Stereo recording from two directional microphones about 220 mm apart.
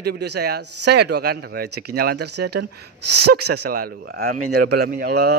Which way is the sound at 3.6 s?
40° right (ahead or behind).